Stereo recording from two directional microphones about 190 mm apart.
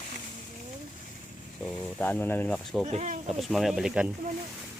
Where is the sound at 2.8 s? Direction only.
40° right (ahead or behind).